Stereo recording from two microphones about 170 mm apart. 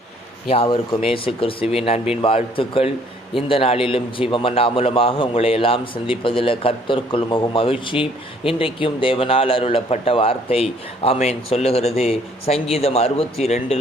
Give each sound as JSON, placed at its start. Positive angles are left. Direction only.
{"t": 0.4, "sound": "speech", "side_deg": 35}